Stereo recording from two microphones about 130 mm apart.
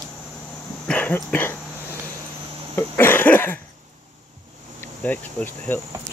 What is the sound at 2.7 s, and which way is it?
Cough, 15° left (ahead or behind).